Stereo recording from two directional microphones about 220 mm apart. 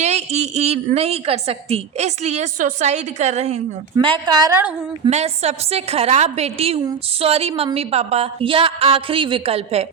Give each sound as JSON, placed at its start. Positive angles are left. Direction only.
{"t": 0.0, "sound": "a woman's voice", "side_deg": -30}
{"t": 3.9, "sound": "a woman's voice", "side_deg": -20}
{"t": 5.0, "sound": "a woman's voice", "side_deg": -30}